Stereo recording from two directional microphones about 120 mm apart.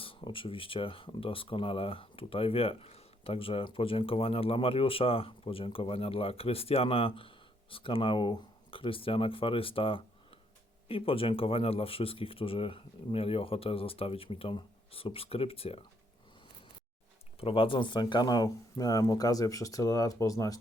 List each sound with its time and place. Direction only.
0.0 s speech: 50° left (ahead or behind)
17.4 s speech: 50° left (ahead or behind); by 20.6 s 30° left (ahead or behind)